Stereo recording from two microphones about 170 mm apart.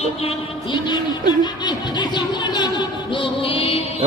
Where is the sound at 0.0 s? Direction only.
35° left (ahead or behind).